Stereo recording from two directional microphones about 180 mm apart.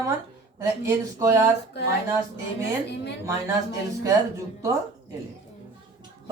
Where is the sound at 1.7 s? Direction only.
70° left (ahead or behind).